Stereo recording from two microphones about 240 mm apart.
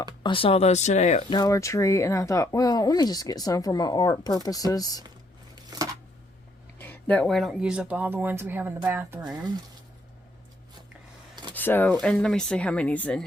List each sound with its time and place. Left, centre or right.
0.2 s speech: left
1.4 s speech: centre
5.7 s a sound: centre
6.7 s speech: centre
11.5 s speech: centre